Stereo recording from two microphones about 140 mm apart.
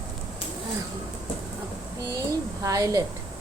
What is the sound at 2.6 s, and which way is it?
Speech, 25° right (ahead or behind).